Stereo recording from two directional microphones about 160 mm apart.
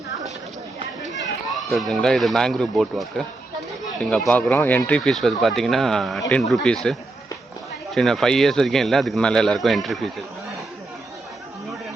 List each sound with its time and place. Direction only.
1.9 s speech: centre (ahead or behind)